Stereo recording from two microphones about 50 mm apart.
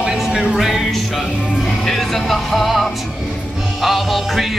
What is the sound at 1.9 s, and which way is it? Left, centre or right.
Music, centre.